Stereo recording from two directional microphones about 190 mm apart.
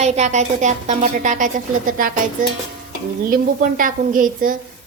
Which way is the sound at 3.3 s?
45° right (ahead or behind).